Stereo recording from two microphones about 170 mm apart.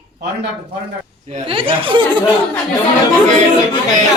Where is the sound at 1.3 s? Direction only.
30° right (ahead or behind).